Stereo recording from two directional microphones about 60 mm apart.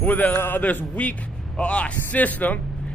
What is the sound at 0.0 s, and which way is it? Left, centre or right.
A man's voice, left.